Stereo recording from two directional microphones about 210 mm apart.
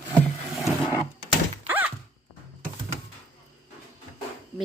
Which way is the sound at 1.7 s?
10° right (ahead or behind).